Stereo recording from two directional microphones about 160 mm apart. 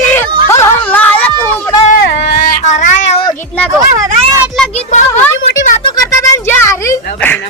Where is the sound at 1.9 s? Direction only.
80° left.